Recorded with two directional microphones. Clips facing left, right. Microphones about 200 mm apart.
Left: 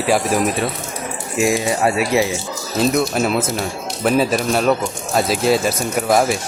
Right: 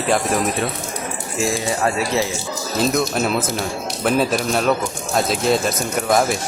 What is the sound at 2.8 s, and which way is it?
Speech, centre (ahead or behind).